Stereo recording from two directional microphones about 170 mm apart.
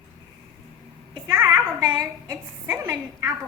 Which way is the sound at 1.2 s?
15° right (ahead or behind).